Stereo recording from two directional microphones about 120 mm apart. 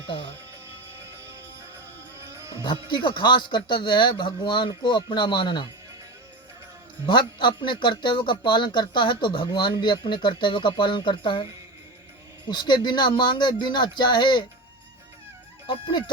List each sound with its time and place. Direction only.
0.1 s speech: 45° left (ahead or behind)
1.0 s music: 20° right (ahead or behind)
2.6 s speech: 40° left (ahead or behind)
7.0 s speech: 40° left (ahead or behind)
12.5 s speech: 40° left (ahead or behind)
15.6 s speech: 40° left (ahead or behind)